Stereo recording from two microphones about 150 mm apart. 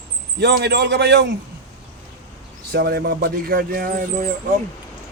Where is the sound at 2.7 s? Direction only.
90° right.